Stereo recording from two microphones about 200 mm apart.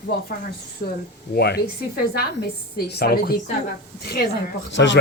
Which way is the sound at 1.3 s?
55° left (ahead or behind).